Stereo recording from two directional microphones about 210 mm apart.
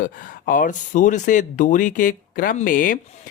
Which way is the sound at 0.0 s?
40° left (ahead or behind).